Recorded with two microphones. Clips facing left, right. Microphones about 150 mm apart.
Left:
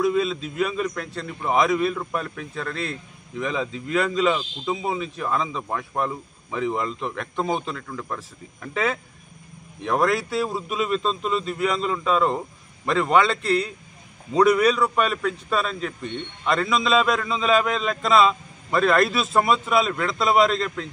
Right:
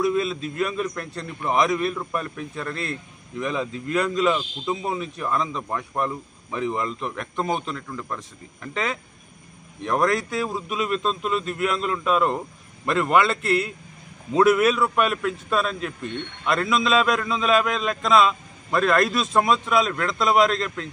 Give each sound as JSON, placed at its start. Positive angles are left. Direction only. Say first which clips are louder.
{"t": 0.0, "sound": "a man's voice", "louder": "left 1 dB", "side_deg": 0}
{"t": 9.8, "sound": "a man's voice", "louder": "even", "side_deg": 0}